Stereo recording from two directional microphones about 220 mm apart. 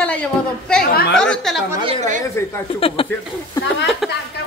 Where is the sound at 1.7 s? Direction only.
20° right (ahead or behind).